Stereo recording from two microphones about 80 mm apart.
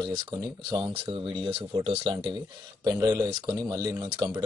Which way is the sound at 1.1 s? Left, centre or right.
Right.